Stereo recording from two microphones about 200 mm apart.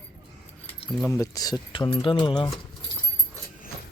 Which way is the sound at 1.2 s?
20° left (ahead or behind).